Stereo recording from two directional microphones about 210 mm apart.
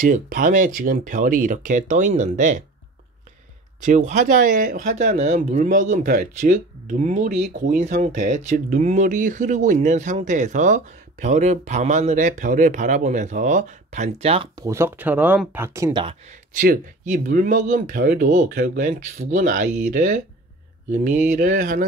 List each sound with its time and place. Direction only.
0.0 s speech: 40° right (ahead or behind)
3.8 s speech: 35° right (ahead or behind)
16.5 s speech: 40° right (ahead or behind)
21.4 s speech: 40° right (ahead or behind)